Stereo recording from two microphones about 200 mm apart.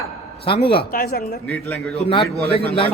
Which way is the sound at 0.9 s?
45° left (ahead or behind).